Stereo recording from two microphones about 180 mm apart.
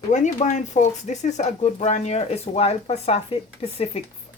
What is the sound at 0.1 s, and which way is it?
Speech, 40° left (ahead or behind).